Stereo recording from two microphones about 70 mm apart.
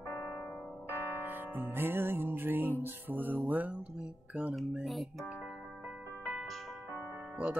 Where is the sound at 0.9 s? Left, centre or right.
Right.